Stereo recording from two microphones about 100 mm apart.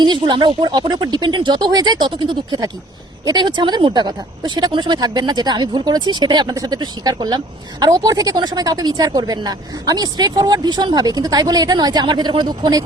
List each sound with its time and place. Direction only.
0.0 s speech: 50° right (ahead or behind)